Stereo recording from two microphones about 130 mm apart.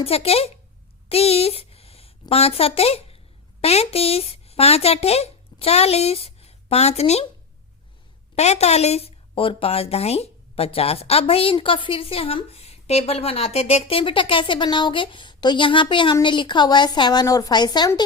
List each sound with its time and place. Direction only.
0.0 s a woman's voice: 50° left (ahead or behind)
1.1 s a sound: 50° left (ahead or behind)
2.3 s a woman's voice: 50° left (ahead or behind)
8.4 s a woman's voice: 55° left (ahead or behind); by 18.0 s 35° left (ahead or behind)